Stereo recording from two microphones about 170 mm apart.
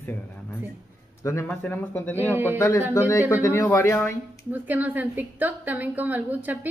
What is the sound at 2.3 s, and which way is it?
Speech, 10° right (ahead or behind).